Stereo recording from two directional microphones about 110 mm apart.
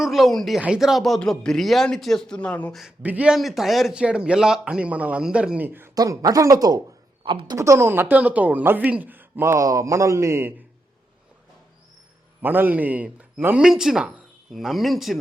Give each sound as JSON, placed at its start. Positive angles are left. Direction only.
{"t": 0.0, "sound": "speech", "side_deg": 0}
{"t": 3.0, "sound": "speech", "side_deg": -15}
{"t": 3.3, "sound": "speech", "side_deg": -5}
{"t": 5.9, "sound": "speech", "side_deg": -35}
{"t": 7.3, "sound": "speech", "side_deg": -50}
{"t": 7.5, "sound": "speech", "side_deg": -25}
{"t": 12.4, "sound": "speech", "side_deg": -15}